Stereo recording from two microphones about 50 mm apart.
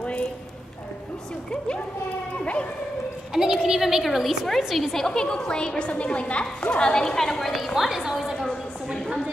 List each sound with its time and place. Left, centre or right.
3.3 s a woman's voice: centre